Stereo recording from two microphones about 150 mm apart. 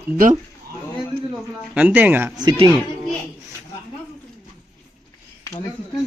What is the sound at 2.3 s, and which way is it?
Speech, 30° right (ahead or behind).